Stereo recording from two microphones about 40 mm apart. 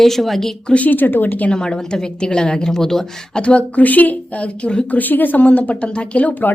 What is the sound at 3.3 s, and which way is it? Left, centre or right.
Speech, left.